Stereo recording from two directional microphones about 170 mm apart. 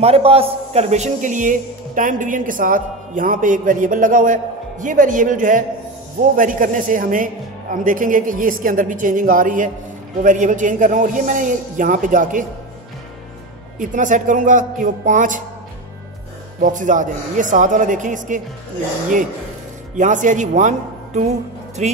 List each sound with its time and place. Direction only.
0.0 s a man's voice: 35° right (ahead or behind); by 12.4 s 50° right (ahead or behind)
13.7 s a man's voice: 50° right (ahead or behind)
16.6 s a man's voice: 50° right (ahead or behind)
20.0 s a man's voice: 50° right (ahead or behind)